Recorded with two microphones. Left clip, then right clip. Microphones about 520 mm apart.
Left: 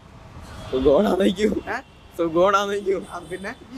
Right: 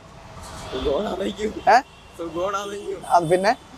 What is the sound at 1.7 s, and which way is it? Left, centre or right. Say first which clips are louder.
Speech: right 14 dB; right.